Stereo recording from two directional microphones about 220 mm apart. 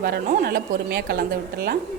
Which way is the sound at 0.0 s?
40° right (ahead or behind).